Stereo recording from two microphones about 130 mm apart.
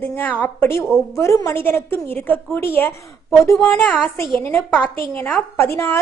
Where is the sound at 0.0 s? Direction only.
15° left (ahead or behind).